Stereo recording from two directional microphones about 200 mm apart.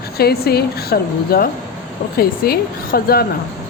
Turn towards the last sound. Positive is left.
turn(degrees=50)  # may be behind; listen again after turning